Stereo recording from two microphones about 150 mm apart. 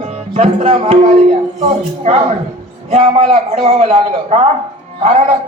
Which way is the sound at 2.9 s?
40° right (ahead or behind).